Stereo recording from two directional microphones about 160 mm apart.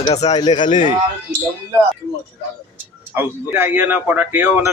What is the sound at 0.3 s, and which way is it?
Speech, 30° left (ahead or behind).